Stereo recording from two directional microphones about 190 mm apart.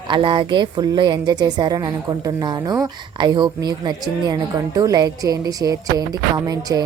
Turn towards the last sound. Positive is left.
turn(degrees=-20)  # may be behind; listen again after turning